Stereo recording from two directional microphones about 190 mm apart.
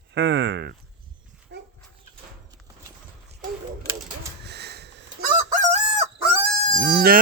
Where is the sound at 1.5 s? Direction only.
60° right (ahead or behind).